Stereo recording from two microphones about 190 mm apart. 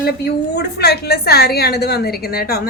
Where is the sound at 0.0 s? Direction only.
60° left (ahead or behind).